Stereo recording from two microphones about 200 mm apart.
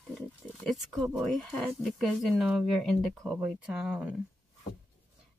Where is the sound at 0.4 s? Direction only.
5° left (ahead or behind).